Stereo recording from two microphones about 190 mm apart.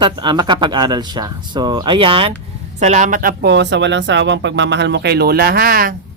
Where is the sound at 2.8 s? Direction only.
40° right (ahead or behind).